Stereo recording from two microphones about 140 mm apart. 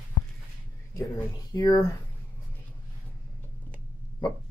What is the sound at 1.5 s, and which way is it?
Speech, 25° left (ahead or behind).